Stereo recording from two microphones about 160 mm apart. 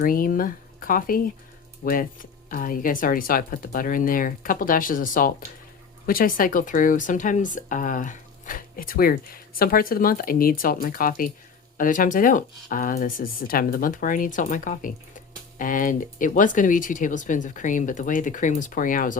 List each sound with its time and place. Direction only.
0.0 s speech: 65° left (ahead or behind)